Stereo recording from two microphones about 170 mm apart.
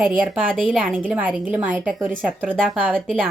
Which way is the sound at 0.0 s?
Centre (ahead or behind).